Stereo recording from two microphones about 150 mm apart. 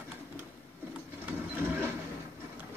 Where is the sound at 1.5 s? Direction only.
15° right (ahead or behind).